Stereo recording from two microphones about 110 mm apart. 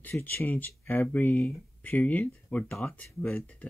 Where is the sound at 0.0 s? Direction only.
20° left (ahead or behind).